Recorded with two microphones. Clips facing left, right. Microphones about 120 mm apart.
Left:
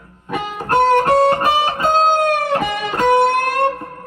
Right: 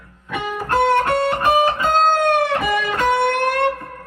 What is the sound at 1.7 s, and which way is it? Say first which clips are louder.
Music: left 2 dB; 40° left (ahead or behind).